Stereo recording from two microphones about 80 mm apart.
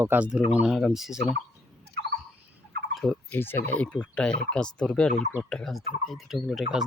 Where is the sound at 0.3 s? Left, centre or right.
Centre.